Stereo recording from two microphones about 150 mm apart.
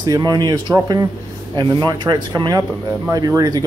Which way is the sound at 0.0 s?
25° right (ahead or behind).